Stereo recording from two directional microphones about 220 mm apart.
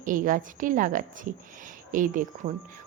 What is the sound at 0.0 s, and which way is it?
A woman's voice, 40° right (ahead or behind).